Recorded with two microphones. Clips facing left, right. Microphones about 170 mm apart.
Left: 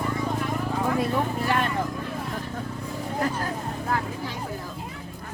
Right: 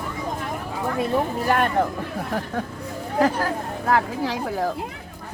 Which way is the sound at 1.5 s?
55° right (ahead or behind).